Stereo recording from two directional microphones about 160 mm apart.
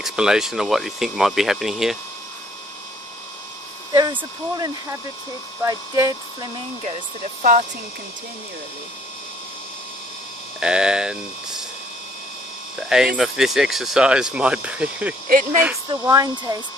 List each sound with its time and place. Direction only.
0.0 s speech: 5° right (ahead or behind)
3.9 s speech: 25° right (ahead or behind)
10.6 s speech: 5° right (ahead or behind)
12.7 s speech: 5° right (ahead or behind)
15.2 s speech: 60° right (ahead or behind)
15.9 s speech: 25° right (ahead or behind)